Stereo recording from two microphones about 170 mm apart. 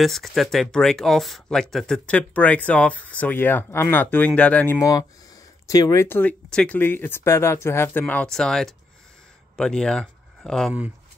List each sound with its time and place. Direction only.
0.0 s speech: centre (ahead or behind)
4.7 s speech: 20° left (ahead or behind); by 10.7 s 5° left (ahead or behind)